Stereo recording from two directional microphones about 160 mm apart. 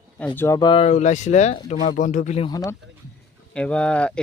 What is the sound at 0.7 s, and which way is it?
Speech, 40° left (ahead or behind).